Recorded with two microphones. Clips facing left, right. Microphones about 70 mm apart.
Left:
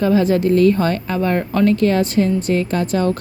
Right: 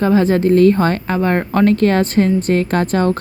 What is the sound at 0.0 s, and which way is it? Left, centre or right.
Speech, right.